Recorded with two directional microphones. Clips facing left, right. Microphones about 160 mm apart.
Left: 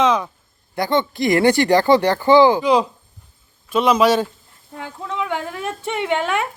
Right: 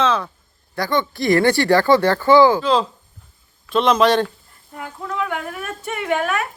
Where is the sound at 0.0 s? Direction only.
15° left (ahead or behind).